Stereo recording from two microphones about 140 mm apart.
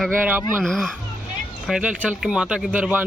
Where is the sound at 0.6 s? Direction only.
Centre (ahead or behind).